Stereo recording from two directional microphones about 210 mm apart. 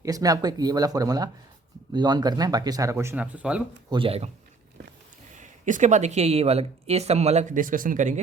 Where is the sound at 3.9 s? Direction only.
25° right (ahead or behind).